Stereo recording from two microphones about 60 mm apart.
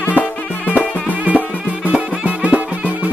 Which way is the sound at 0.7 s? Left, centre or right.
Right.